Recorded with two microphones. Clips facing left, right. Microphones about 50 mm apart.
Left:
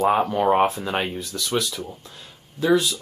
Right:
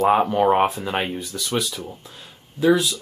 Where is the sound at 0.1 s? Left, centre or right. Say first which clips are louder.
Right 2 dB; centre.